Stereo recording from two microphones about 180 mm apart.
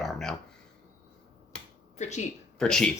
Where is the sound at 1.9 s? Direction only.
40° left (ahead or behind).